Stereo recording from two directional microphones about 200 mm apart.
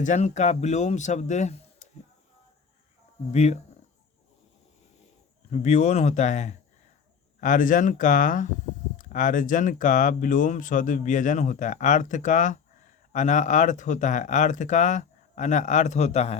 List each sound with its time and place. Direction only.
0.0 s speech: 35° left (ahead or behind)
3.3 s speech: 35° left (ahead or behind)
5.5 s speech: 35° left (ahead or behind)